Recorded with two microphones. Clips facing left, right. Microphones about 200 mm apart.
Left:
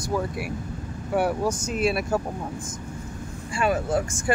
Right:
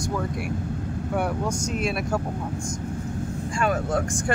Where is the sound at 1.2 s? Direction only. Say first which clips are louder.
Left 4 dB; 5° left (ahead or behind).